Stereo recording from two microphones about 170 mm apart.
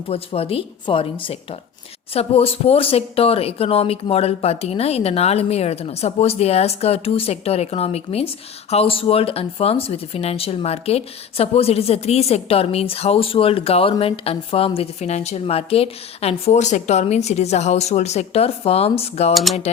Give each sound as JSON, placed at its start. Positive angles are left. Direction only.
{"t": 0.1, "sound": "speech", "side_deg": 35}
{"t": 19.3, "sound": "speech", "side_deg": 0}